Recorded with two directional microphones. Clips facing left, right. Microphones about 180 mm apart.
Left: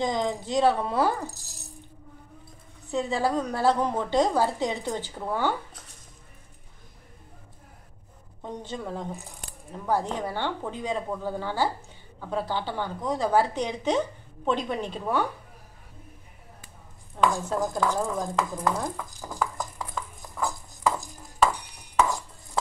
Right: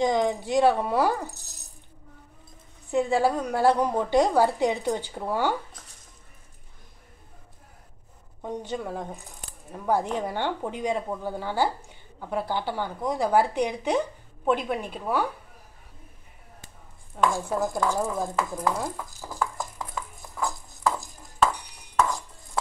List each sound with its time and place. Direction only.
0.0 s a woman's voice: 15° right (ahead or behind)
2.9 s a woman's voice: 15° right (ahead or behind)
8.4 s a woman's voice: 10° right (ahead or behind)
17.3 s stir: 10° right (ahead or behind)